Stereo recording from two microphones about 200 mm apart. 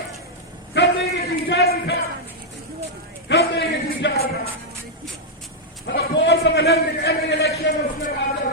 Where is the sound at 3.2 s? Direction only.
60° left (ahead or behind).